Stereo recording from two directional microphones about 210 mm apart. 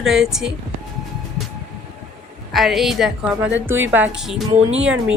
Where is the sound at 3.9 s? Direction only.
5° right (ahead or behind).